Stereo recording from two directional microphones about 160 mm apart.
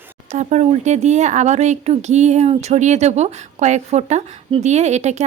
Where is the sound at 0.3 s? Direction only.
45° right (ahead or behind).